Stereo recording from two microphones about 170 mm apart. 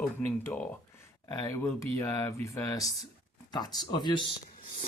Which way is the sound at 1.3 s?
20° left (ahead or behind).